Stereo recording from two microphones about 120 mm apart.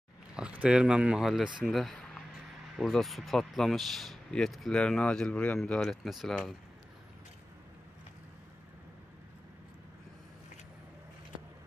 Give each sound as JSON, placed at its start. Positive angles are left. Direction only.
{"t": 0.4, "sound": "speech", "side_deg": -10}